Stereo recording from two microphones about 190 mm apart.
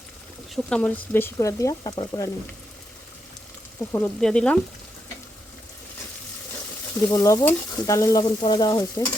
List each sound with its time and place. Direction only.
0.5 s speech: 5° left (ahead or behind); by 2.3 s 20° left (ahead or behind)
3.9 s speech: 5° left (ahead or behind)
7.1 s stir: 15° left (ahead or behind)